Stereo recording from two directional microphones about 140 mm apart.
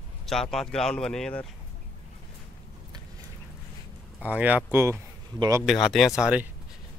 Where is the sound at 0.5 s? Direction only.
5° left (ahead or behind).